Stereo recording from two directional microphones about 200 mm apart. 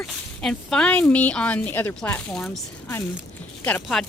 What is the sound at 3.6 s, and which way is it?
Speech, 5° left (ahead or behind).